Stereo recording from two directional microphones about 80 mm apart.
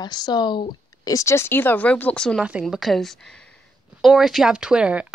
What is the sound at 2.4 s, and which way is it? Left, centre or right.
Speech, centre.